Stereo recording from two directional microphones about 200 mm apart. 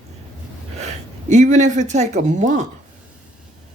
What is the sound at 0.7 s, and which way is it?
Speech, 35° right (ahead or behind).